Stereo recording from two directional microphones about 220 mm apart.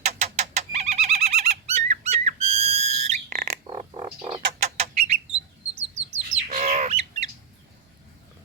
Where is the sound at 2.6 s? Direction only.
30° right (ahead or behind).